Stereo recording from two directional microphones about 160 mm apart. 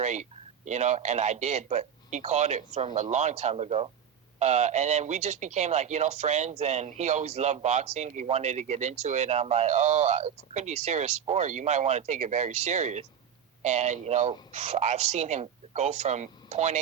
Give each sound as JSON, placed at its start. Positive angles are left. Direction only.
{"t": 0.0, "sound": "speech", "side_deg": -45}